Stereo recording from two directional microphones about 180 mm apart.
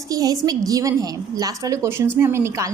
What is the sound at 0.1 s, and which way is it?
A woman's voice, 20° right (ahead or behind).